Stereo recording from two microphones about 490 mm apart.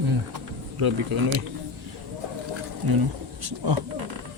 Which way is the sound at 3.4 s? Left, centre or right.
Right.